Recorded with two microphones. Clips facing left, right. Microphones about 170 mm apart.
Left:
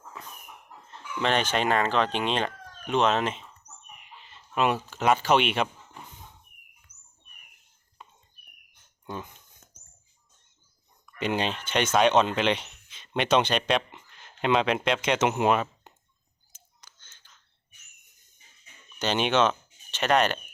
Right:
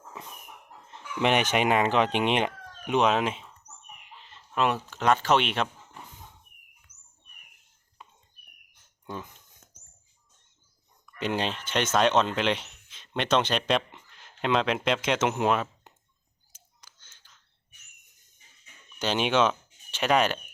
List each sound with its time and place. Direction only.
0.9 s speech: 15° right (ahead or behind)
4.2 s speech: 5° left (ahead or behind)
8.7 s a sound: centre (ahead or behind)
11.0 s speech: 5° left (ahead or behind)
16.8 s whispering: 10° right (ahead or behind)
18.9 s speech: 5° right (ahead or behind)